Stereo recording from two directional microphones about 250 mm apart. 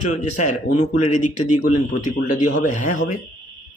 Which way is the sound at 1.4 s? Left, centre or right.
Left.